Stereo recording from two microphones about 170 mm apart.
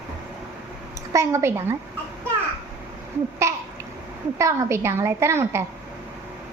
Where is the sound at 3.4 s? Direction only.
15° right (ahead or behind).